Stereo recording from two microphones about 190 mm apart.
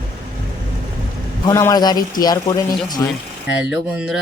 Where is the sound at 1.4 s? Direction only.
15° left (ahead or behind).